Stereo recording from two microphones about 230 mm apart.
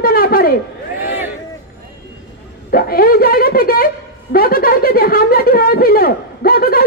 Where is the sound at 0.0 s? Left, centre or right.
Left.